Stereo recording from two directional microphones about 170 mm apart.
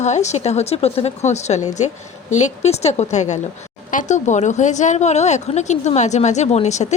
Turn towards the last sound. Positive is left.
turn(degrees=40)  # may be behind; listen again after turning